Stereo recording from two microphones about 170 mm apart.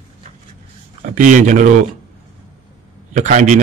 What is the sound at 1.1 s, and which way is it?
Speech, 50° right (ahead or behind).